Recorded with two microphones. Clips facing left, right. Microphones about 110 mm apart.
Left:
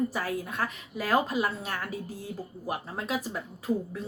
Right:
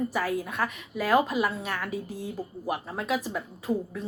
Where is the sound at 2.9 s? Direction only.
30° left (ahead or behind).